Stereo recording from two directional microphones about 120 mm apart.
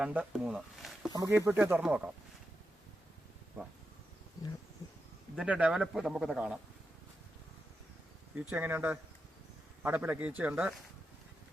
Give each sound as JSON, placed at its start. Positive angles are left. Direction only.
{"t": 0.0, "sound": "speech", "side_deg": -15}
{"t": 1.3, "sound": "speech", "side_deg": -20}
{"t": 5.4, "sound": "speech", "side_deg": -10}
{"t": 8.4, "sound": "speech", "side_deg": -15}